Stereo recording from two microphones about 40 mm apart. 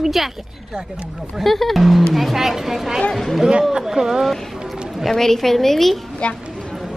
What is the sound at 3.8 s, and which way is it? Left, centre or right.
Speech, centre.